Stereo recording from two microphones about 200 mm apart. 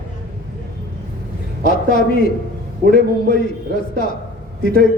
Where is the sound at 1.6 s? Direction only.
45° left (ahead or behind).